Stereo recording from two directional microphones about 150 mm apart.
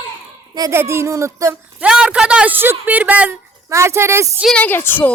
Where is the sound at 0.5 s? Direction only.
20° right (ahead or behind).